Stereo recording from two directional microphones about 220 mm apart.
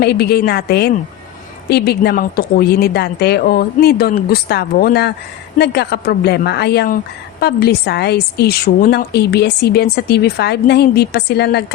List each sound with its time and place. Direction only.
0.0 s a woman's voice: 45° left (ahead or behind)